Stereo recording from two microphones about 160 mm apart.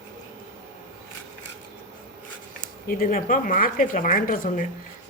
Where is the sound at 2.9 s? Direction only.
65° left (ahead or behind).